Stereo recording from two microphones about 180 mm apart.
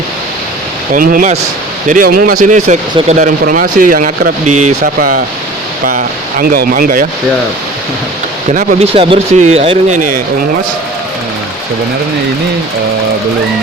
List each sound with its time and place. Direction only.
0.9 s speech: 50° right (ahead or behind)
6.4 s speech: 55° right (ahead or behind)
8.5 s speech: 35° right (ahead or behind)